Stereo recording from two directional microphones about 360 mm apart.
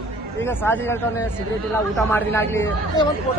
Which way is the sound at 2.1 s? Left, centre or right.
Centre.